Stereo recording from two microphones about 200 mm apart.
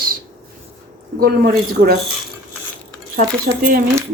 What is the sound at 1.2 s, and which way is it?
Speech, 50° right (ahead or behind).